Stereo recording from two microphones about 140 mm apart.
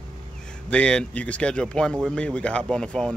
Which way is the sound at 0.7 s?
5° left (ahead or behind).